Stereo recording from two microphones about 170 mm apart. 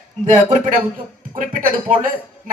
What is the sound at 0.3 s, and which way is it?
Speech, 45° right (ahead or behind).